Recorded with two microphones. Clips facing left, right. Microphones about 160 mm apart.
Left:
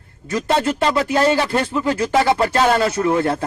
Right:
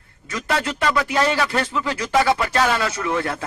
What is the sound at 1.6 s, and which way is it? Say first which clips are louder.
Speech: left 5 dB; 50° left (ahead or behind).